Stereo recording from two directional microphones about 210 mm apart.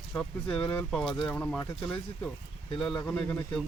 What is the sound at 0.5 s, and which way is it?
Speech, 10° left (ahead or behind).